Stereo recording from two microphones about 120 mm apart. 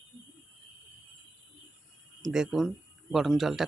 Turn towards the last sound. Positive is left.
turn(degrees=0)  # may be behind; listen again after turning